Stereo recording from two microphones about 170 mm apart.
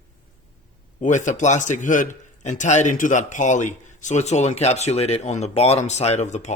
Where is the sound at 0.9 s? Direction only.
45° left (ahead or behind).